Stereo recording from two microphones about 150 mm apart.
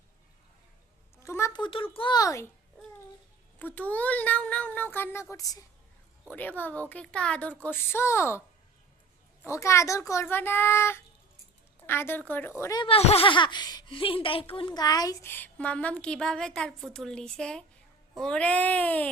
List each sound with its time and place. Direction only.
1.2 s a sound: 20° left (ahead or behind)
1.6 s speech: 35° left (ahead or behind)
3.6 s a woman's voice: 10° left (ahead or behind)
6.3 s a woman's voice: 10° left (ahead or behind)
9.4 s a woman's voice: 20° left (ahead or behind)
12.8 s speech: 40° left (ahead or behind); by 15.3 s 25° left (ahead or behind)
15.3 s a woman's voice: 10° left (ahead or behind)